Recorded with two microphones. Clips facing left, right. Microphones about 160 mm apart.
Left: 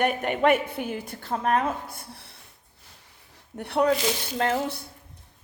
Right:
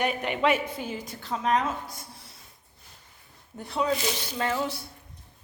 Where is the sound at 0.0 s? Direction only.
50° left (ahead or behind).